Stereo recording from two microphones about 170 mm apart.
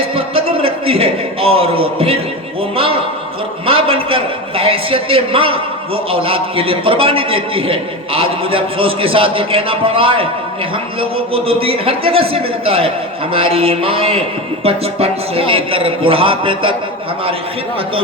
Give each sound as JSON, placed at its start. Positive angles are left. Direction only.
{"t": 0.3, "sound": "a sound", "side_deg": -30}
{"t": 2.7, "sound": "a man's voice", "side_deg": -35}
{"t": 11.3, "sound": "a man's voice", "side_deg": -35}